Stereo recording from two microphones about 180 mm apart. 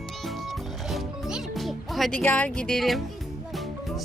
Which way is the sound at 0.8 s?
Centre (ahead or behind).